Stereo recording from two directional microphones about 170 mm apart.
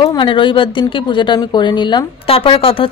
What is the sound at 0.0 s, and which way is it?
A woman's voice, 30° left (ahead or behind).